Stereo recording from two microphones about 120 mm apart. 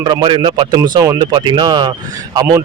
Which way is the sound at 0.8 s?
25° right (ahead or behind).